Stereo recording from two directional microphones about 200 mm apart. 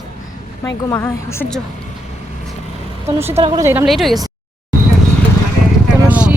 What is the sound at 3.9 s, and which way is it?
Speech, centre (ahead or behind).